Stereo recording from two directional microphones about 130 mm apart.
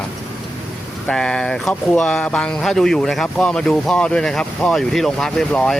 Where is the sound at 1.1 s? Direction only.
5° left (ahead or behind).